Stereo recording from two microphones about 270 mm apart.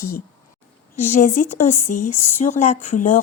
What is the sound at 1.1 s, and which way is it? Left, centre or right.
Speech, left.